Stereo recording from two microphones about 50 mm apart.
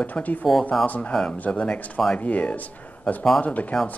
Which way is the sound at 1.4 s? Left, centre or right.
Left.